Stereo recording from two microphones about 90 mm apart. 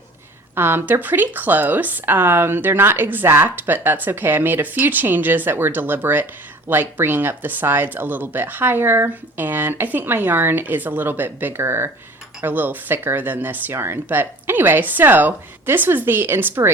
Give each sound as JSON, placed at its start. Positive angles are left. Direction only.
{"t": 0.5, "sound": "a woman's voice", "side_deg": -25}